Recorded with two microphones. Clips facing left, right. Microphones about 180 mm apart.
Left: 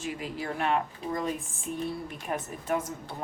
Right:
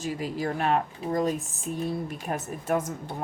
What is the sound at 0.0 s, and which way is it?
Speech, 40° right (ahead or behind).